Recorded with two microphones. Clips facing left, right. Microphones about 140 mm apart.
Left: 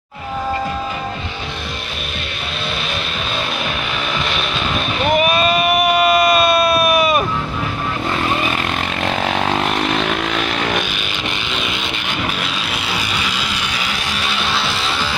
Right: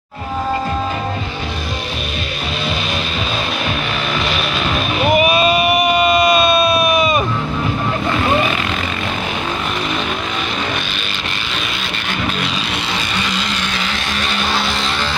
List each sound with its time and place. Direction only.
4.3 s vehicle: 5° right (ahead or behind)
13.1 s vehicle: 5° left (ahead or behind)